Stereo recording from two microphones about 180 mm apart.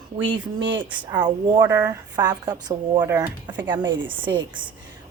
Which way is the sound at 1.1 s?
25° right (ahead or behind).